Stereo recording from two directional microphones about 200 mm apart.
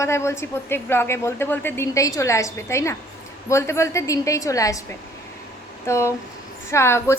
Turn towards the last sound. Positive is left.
turn(degrees=15)  # may be behind; listen again after turning